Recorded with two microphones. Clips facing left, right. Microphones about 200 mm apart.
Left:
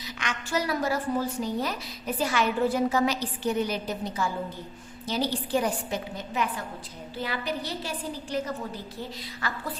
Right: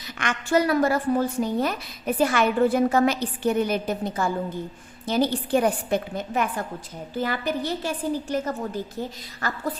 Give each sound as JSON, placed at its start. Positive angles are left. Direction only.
{"t": 0.2, "sound": "a woman's voice", "side_deg": -55}